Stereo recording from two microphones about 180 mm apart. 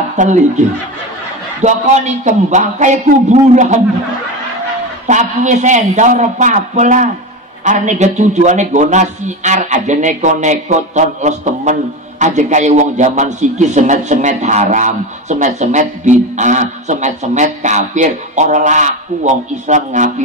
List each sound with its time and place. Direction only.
0.1 s a man's voice: 40° right (ahead or behind)
5.0 s a man's voice: 40° right (ahead or behind)